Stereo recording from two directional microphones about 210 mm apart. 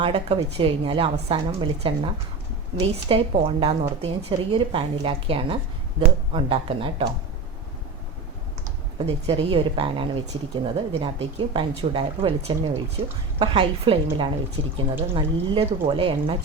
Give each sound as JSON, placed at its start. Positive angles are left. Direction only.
{"t": 0.0, "sound": "a woman's voice", "side_deg": -25}
{"t": 9.0, "sound": "a woman's voice", "side_deg": -25}